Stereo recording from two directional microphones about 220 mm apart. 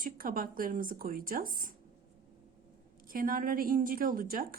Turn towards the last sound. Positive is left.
turn(degrees=-40)  # may be behind; listen again after turning